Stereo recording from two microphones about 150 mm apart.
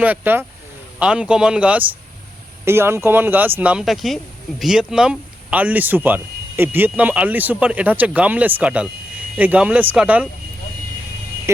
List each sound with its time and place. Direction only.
0.0 s speech: 10° right (ahead or behind)
11.5 s speech: 20° right (ahead or behind)